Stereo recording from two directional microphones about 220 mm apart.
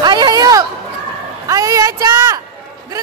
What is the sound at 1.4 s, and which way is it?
Speech, 15° right (ahead or behind).